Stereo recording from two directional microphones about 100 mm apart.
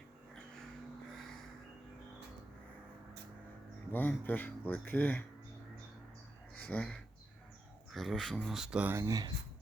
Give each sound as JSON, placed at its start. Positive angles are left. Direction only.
{"t": 0.3, "sound": "a sound", "side_deg": 5}
{"t": 3.9, "sound": "speech", "side_deg": 20}
{"t": 6.6, "sound": "speech", "side_deg": 15}
{"t": 7.9, "sound": "speech", "side_deg": 0}
{"t": 8.9, "sound": "speech", "side_deg": -30}